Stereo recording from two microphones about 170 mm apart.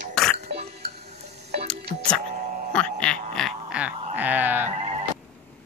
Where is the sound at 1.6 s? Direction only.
5° left (ahead or behind).